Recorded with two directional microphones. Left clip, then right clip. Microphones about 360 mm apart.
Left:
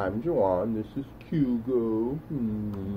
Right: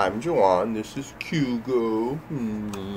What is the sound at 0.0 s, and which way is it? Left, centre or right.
Speech, right.